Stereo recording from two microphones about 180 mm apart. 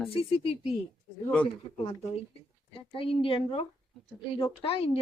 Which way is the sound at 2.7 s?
30° left (ahead or behind).